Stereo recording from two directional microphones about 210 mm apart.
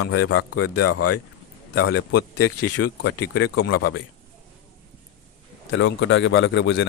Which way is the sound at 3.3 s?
55° left (ahead or behind).